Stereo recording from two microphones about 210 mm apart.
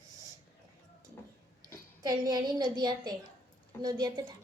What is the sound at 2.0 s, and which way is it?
A woman's voice, 20° right (ahead or behind).